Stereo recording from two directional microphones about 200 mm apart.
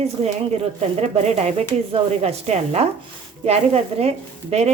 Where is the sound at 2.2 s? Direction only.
30° right (ahead or behind).